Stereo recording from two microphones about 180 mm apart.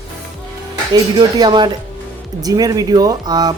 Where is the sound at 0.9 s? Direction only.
20° right (ahead or behind).